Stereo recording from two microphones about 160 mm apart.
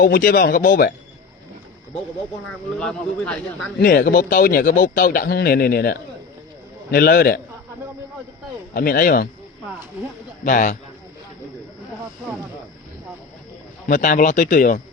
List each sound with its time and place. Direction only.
0.0 s speech: 60° left (ahead or behind)
2.7 s speech: 5° left (ahead or behind)
3.8 s a man's voice: 75° left (ahead or behind)
8.7 s speech: 70° left (ahead or behind)
10.4 s speech: 55° left (ahead or behind)
13.8 s speech: 55° left (ahead or behind)